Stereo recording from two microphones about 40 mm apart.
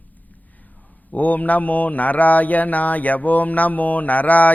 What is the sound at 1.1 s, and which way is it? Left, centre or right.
Mantra, left.